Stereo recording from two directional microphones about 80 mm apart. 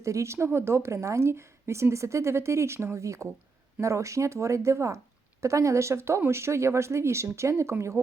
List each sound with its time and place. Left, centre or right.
0.0 s a woman's voice: right